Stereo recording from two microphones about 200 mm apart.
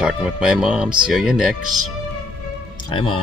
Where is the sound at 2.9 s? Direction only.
25° left (ahead or behind).